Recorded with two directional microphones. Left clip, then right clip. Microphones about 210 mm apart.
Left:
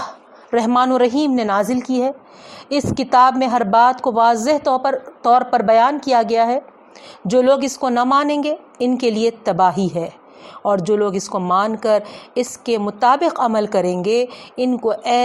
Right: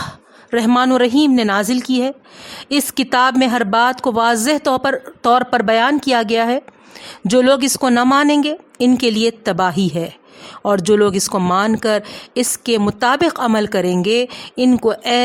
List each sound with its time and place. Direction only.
0.5 s a woman's voice: 25° right (ahead or behind)